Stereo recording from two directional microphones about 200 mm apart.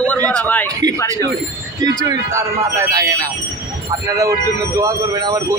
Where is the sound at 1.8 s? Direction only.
20° right (ahead or behind).